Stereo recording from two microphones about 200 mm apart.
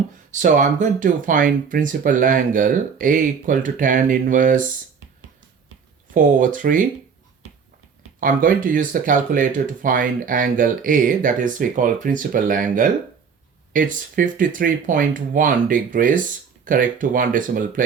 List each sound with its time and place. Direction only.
0.3 s speech: 40° right (ahead or behind)
6.1 s speech: 40° right (ahead or behind)
8.2 s speech: 45° right (ahead or behind)